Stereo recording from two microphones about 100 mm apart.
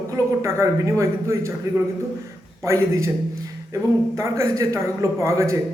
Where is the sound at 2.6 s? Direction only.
30° right (ahead or behind).